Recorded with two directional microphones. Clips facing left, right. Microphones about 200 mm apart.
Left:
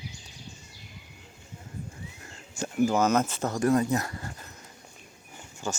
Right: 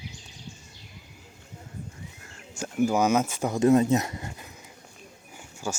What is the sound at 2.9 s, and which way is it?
Speech, 10° right (ahead or behind).